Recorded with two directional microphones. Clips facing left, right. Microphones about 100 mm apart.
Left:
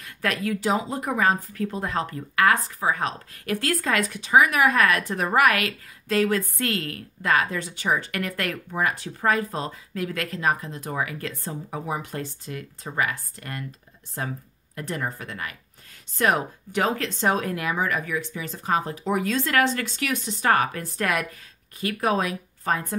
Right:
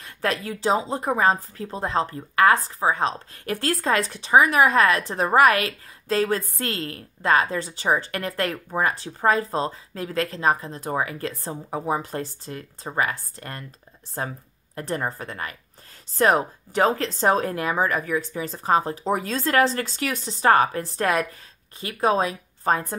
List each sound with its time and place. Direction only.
0.0 s a woman's voice: 30° right (ahead or behind)